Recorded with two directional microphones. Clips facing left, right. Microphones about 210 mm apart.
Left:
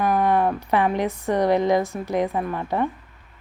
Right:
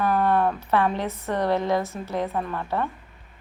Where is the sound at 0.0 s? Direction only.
15° left (ahead or behind).